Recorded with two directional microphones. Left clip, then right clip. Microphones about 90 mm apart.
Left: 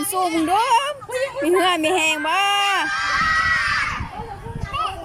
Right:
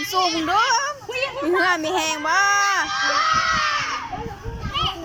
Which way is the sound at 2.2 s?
35° left (ahead or behind).